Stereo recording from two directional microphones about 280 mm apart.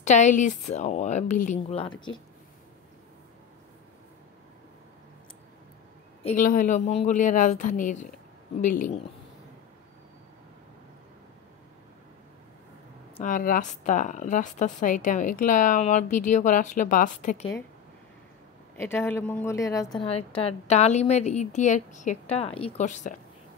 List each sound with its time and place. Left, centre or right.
0.0 s a woman's voice: left
6.2 s a woman's voice: left
13.2 s a woman's voice: left
18.8 s a woman's voice: centre; by 23.1 s left